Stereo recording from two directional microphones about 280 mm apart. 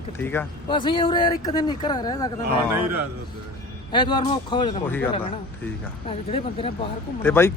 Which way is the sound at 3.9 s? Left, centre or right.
Centre.